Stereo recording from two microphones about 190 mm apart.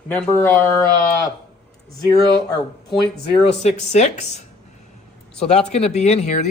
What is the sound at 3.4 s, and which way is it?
Speech, 35° left (ahead or behind).